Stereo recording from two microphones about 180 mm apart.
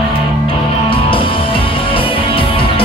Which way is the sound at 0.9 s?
30° left (ahead or behind).